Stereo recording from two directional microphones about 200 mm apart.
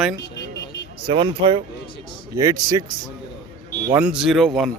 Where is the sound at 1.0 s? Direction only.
25° right (ahead or behind).